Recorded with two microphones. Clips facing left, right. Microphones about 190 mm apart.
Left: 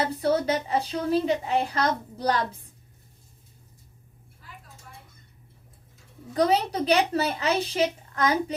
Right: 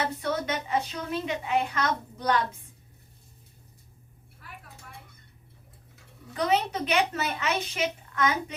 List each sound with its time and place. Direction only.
0.0 s a woman's voice: 35° left (ahead or behind)
4.4 s a sound: 65° right (ahead or behind)
6.3 s a woman's voice: 35° left (ahead or behind)